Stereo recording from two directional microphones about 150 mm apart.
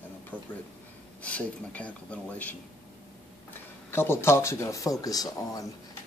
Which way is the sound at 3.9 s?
15° left (ahead or behind).